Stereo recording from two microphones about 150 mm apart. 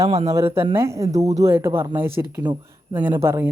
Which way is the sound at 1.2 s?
45° right (ahead or behind).